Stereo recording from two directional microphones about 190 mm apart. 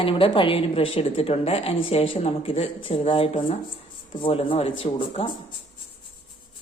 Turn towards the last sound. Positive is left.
turn(degrees=30)  # may be behind; listen again after turning